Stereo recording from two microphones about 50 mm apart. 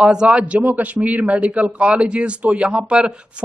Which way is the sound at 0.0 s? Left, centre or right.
Centre.